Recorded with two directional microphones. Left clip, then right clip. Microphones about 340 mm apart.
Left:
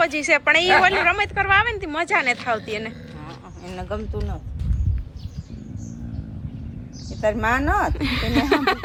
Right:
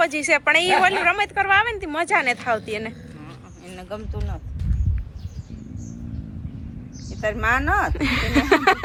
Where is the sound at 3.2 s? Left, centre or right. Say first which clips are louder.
Left 4 dB; left.